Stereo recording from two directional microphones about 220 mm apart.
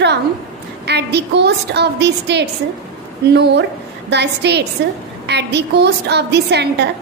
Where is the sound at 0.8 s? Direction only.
50° right (ahead or behind).